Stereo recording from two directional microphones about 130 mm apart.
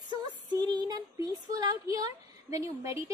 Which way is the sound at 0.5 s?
30° right (ahead or behind).